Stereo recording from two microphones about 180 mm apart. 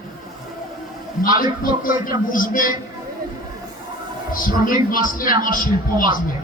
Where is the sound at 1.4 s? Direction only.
50° left (ahead or behind).